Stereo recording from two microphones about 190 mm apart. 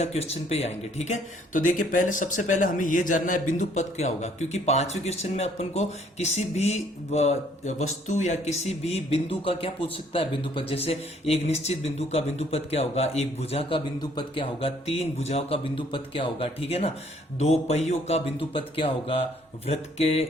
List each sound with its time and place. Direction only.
0.0 s speech: 35° left (ahead or behind)